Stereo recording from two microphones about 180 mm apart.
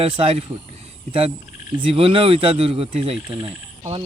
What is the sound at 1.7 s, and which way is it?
Speech, 30° right (ahead or behind).